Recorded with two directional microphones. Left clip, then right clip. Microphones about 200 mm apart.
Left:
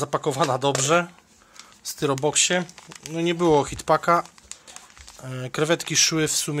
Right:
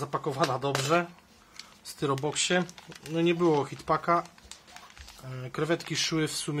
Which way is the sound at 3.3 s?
40° left (ahead or behind).